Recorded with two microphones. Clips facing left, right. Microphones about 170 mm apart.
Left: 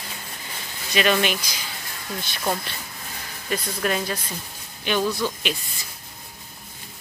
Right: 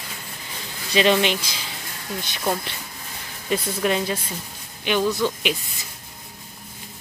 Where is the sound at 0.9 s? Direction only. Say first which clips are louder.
Right 3 dB; 25° right (ahead or behind).